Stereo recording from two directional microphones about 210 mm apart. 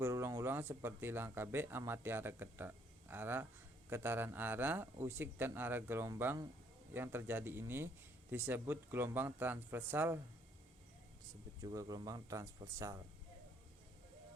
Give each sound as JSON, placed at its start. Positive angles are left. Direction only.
{"t": 0.0, "sound": "speech", "side_deg": -10}
{"t": 11.6, "sound": "speech", "side_deg": -15}